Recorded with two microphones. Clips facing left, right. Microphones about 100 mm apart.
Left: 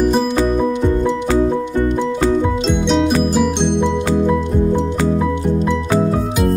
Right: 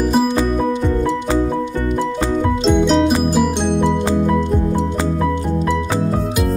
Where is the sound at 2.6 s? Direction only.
Centre (ahead or behind).